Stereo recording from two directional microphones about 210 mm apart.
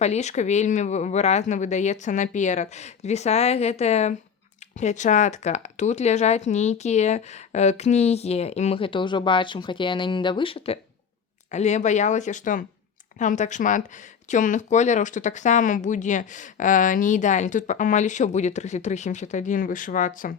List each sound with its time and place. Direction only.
0.0 s speech: 30° left (ahead or behind)